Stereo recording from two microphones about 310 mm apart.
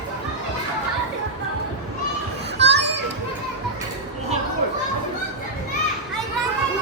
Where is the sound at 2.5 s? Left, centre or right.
Right.